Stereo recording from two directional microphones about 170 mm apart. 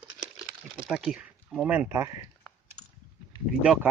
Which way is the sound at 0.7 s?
5° right (ahead or behind).